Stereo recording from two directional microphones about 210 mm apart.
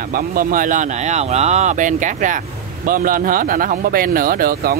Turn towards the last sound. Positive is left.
turn(degrees=-45)  # may be behind; listen again after turning